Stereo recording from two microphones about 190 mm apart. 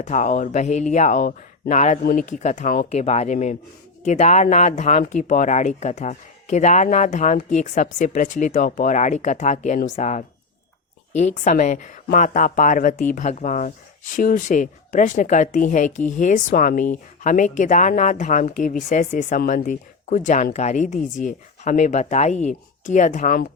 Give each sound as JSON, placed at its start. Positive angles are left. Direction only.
{"t": 0.0, "sound": "speech", "side_deg": 40}